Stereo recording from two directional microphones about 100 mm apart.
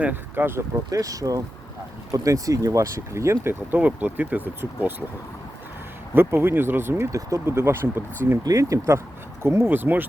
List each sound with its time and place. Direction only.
0.0 s speech: 20° right (ahead or behind)
0.9 s speech: 35° right (ahead or behind); by 5.0 s 20° right (ahead or behind)
6.1 s speech: 20° right (ahead or behind)